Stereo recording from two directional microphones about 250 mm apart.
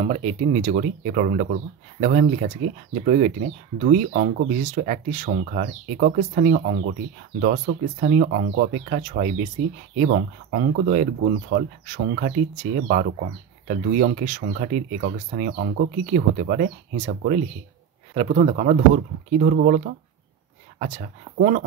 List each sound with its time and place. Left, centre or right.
0.0 s speech: right
13.7 s speech: right
21.4 s speech: right